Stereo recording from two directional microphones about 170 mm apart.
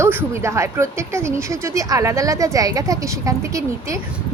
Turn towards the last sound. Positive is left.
turn(degrees=-20)  # may be behind; listen again after turning